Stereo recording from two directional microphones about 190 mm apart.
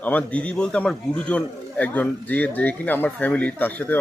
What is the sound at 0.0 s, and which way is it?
Speech, 10° left (ahead or behind).